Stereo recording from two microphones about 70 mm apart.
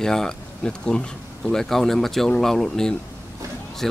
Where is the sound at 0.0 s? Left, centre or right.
Centre.